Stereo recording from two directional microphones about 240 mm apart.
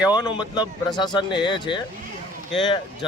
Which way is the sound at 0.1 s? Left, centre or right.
Centre.